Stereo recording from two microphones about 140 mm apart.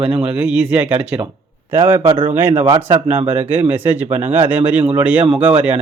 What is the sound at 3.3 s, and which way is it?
A man's voice, 15° right (ahead or behind).